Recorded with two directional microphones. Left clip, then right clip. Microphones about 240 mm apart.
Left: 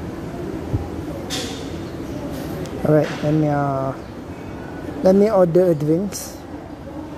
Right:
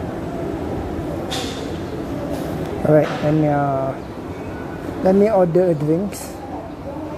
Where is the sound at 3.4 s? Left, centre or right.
Centre.